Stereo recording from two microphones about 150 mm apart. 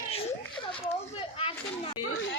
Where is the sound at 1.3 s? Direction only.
40° left (ahead or behind).